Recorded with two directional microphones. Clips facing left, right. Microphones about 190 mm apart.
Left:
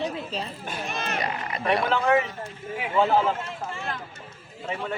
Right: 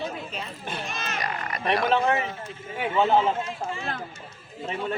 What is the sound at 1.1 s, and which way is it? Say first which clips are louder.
Speech: left 2 dB; 25° left (ahead or behind).